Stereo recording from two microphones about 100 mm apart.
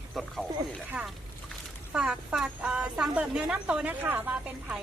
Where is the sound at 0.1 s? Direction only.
Centre (ahead or behind).